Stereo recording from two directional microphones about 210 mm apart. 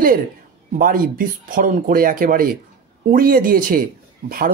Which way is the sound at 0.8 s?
40° right (ahead or behind).